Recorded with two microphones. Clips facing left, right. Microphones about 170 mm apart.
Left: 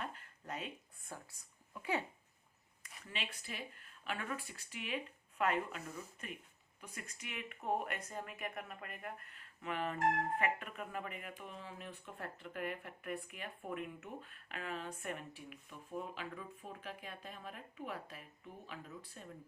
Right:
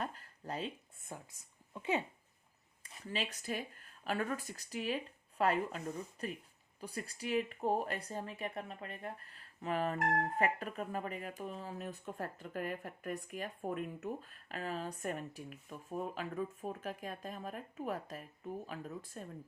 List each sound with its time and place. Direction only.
0.0 s a sound: 35° right (ahead or behind)
1.7 s speech: 20° right (ahead or behind)
2.8 s speech: 35° right (ahead or behind)